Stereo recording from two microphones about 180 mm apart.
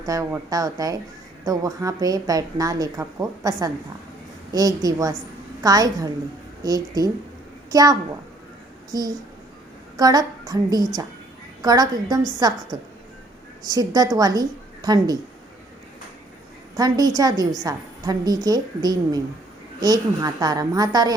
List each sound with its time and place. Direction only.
0.0 s speech: 20° right (ahead or behind)
13.7 s speech: 20° right (ahead or behind)
16.7 s speech: 20° right (ahead or behind)